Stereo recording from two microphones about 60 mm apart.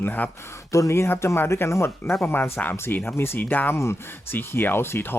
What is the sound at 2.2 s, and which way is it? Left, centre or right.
Speech, left.